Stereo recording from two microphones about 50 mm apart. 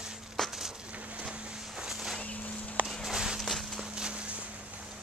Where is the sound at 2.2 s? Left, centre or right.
Left.